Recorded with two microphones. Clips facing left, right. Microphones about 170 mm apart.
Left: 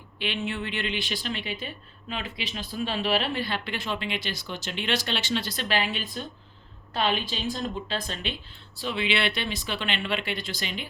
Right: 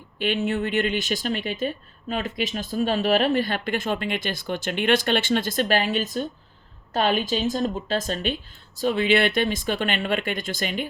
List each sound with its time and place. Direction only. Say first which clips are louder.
0.2 s speech: right 7 dB; 45° right (ahead or behind)